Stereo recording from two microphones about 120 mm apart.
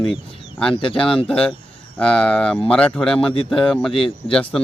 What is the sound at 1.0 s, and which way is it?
Speech, 5° left (ahead or behind).